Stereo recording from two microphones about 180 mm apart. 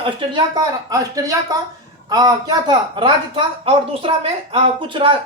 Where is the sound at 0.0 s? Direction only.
25° right (ahead or behind).